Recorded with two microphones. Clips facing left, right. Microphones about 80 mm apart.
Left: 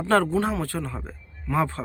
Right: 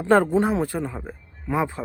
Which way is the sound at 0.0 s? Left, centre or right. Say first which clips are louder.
Right 3 dB; centre.